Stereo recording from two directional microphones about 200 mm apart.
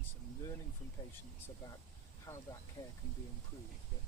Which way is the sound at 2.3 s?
20° left (ahead or behind).